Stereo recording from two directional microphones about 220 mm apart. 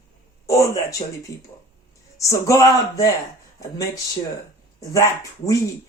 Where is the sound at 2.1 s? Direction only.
15° left (ahead or behind).